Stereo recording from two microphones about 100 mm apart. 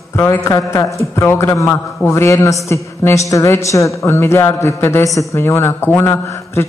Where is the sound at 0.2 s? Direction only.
30° left (ahead or behind).